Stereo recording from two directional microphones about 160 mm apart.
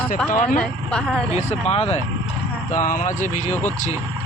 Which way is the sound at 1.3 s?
40° left (ahead or behind).